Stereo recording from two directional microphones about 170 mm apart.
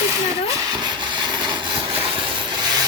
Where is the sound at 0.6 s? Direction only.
25° right (ahead or behind).